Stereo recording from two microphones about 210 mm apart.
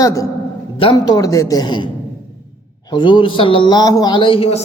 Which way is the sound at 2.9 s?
25° left (ahead or behind).